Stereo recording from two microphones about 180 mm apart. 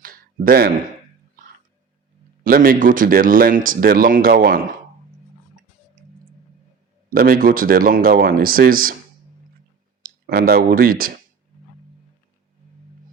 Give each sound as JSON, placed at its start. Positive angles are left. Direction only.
{"t": 0.0, "sound": "a sound", "side_deg": -55}
{"t": 2.4, "sound": "speech", "side_deg": -50}
{"t": 7.1, "sound": "speech", "side_deg": -55}
{"t": 10.0, "sound": "speech", "side_deg": -60}